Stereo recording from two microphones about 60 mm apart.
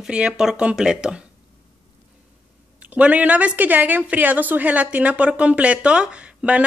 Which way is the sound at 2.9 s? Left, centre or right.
Right.